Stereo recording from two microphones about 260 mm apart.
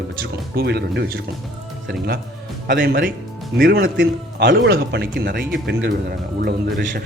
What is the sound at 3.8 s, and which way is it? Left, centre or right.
A man's voice, right.